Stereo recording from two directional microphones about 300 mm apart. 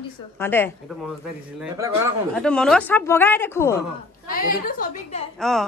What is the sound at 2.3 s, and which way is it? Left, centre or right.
Speech, centre.